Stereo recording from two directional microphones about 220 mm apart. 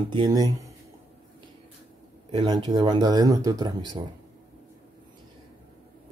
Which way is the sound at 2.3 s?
20° right (ahead or behind).